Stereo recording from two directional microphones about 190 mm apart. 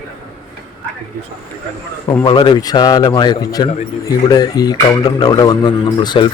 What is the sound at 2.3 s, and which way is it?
A man's voice, 25° left (ahead or behind).